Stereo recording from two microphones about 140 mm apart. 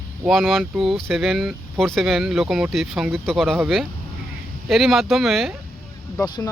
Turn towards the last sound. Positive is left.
turn(degrees=30)  # may be behind; listen again after turning